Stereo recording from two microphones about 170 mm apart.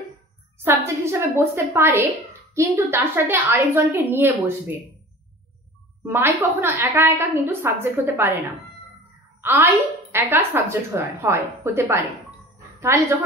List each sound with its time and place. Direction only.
0.7 s a woman's voice: 15° right (ahead or behind)
6.0 s a woman's voice: 10° right (ahead or behind)
9.4 s a woman's voice: 15° right (ahead or behind)